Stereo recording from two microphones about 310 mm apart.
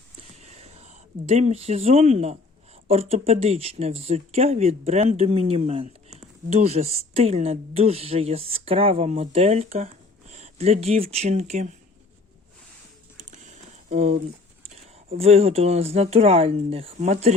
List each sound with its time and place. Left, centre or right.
0.4 s whispering: right
1.3 s speech: right
13.9 s speech: right